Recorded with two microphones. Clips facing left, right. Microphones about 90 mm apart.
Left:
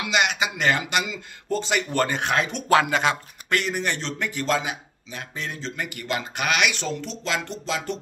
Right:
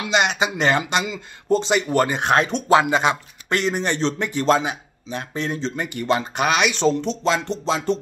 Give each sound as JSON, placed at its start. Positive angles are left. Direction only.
{"t": 0.0, "sound": "speech", "side_deg": -30}